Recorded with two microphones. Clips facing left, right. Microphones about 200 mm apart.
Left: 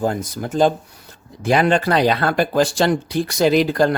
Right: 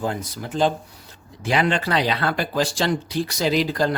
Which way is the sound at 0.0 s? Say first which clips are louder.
Left 5 dB; 45° left (ahead or behind).